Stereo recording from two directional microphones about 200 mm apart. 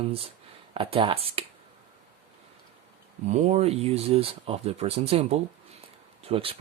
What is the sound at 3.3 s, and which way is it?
Speech, 35° right (ahead or behind).